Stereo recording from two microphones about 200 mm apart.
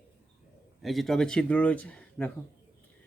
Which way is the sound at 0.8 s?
Centre (ahead or behind).